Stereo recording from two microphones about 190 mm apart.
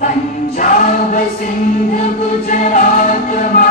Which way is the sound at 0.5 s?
40° left (ahead or behind).